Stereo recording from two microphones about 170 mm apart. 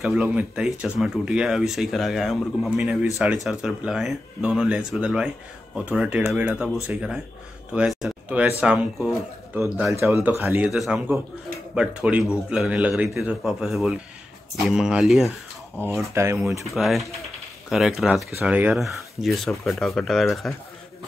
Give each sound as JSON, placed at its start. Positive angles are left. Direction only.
{"t": 0.0, "sound": "speech", "side_deg": -5}
{"t": 9.9, "sound": "speech", "side_deg": -15}
{"t": 10.5, "sound": "speech", "side_deg": -5}
{"t": 16.2, "sound": "speech", "side_deg": -15}
{"t": 16.6, "sound": "speech", "side_deg": 0}